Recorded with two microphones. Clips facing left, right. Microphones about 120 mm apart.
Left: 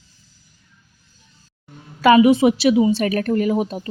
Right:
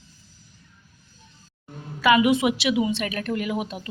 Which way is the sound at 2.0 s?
35° left (ahead or behind).